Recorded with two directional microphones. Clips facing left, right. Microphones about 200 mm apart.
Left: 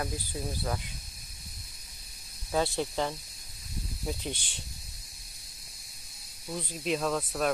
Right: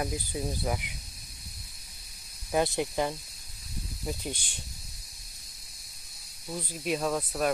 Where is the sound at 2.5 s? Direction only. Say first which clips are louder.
Right 2 dB; 15° right (ahead or behind).